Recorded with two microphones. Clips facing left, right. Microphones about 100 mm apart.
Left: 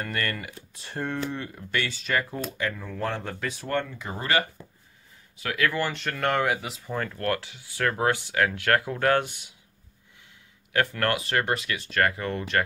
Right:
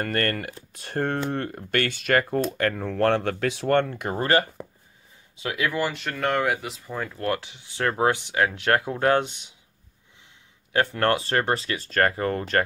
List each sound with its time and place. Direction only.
0.0 s speech: 50° right (ahead or behind); by 3.8 s 90° right
3.9 s speech: 50° right (ahead or behind)
5.3 s speech: 20° right (ahead or behind)
5.9 s speech: centre (ahead or behind)
7.2 s speech: 20° right (ahead or behind)
10.7 s speech: 30° right (ahead or behind)